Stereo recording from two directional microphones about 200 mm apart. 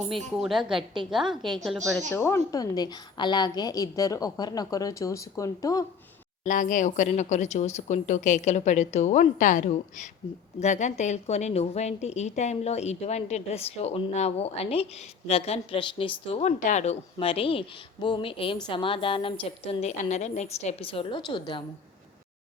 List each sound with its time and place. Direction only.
0.1 s a woman's voice: centre (ahead or behind); by 5.8 s 15° left (ahead or behind)
6.4 s a woman's voice: 40° left (ahead or behind); by 21.6 s 25° left (ahead or behind)